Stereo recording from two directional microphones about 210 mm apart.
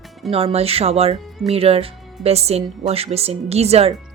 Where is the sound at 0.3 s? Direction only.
25° right (ahead or behind).